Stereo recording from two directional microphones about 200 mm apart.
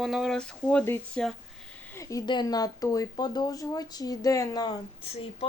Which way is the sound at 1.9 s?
15° left (ahead or behind).